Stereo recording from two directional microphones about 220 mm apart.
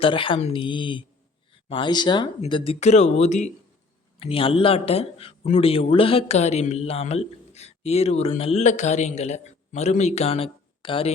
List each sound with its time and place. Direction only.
0.0 s speech: 25° left (ahead or behind)